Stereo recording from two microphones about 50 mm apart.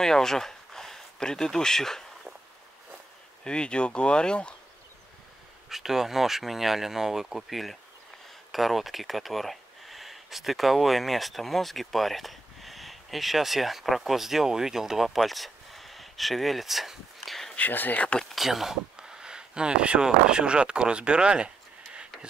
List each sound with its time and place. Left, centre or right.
0.0 s speech: centre
3.4 s speech: centre
5.7 s speech: centre
17.6 s speech: left
18.0 s speech: left
18.3 s speech: centre